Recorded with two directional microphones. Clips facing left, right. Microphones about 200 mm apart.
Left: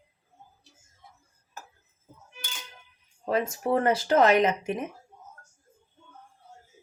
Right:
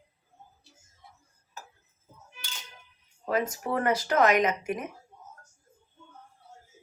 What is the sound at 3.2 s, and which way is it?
Speech, 25° left (ahead or behind).